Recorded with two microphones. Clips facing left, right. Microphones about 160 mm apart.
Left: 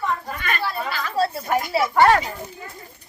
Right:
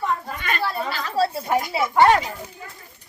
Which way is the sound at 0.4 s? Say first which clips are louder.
Right 1 dB; 30° right (ahead or behind).